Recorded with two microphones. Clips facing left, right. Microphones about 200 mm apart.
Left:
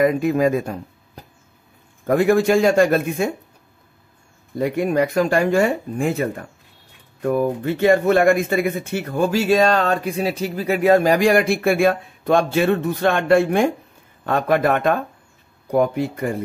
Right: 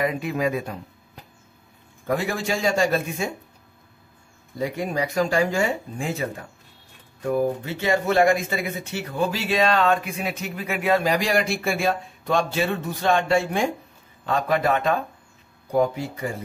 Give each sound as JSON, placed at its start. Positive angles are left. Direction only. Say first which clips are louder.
{"t": 0.0, "sound": "speech", "louder": "left 7 dB", "side_deg": 45}
{"t": 4.6, "sound": "speech", "louder": "left 7 dB", "side_deg": 60}